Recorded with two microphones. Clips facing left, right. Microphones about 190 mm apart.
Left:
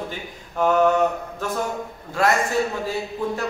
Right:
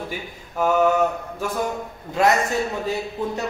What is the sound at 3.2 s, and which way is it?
Speech, 20° right (ahead or behind).